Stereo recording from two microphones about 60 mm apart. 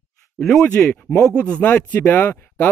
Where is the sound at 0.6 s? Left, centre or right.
Centre.